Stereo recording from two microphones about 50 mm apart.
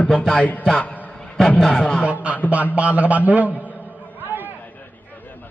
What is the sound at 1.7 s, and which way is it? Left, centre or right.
Speech, left.